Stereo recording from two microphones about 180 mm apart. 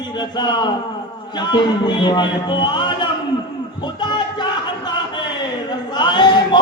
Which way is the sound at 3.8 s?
25° left (ahead or behind).